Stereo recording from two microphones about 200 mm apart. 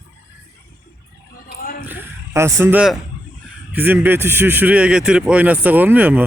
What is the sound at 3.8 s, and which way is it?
Speech, 10° right (ahead or behind).